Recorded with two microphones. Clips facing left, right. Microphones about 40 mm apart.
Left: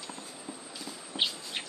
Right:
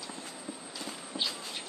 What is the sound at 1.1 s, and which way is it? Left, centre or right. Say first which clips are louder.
Insect: left 4 dB; left.